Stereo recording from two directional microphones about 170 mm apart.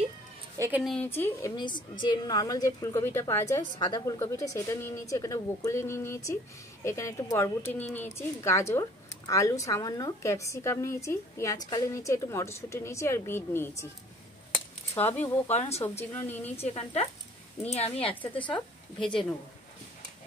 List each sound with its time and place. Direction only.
0.6 s a sound: 10° right (ahead or behind)
0.8 s a woman's voice: 10° left (ahead or behind)
15.4 s a woman's voice: 40° left (ahead or behind)
16.2 s speech: 15° left (ahead or behind)
16.6 s a woman's voice: 35° left (ahead or behind)